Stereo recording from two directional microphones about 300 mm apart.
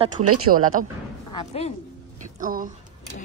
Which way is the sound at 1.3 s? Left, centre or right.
Centre.